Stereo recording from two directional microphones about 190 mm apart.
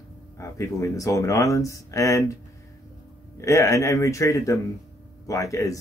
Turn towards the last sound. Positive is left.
turn(degrees=15)  # may be behind; listen again after turning